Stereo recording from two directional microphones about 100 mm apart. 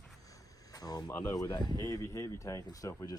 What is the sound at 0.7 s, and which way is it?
Speech, 40° left (ahead or behind).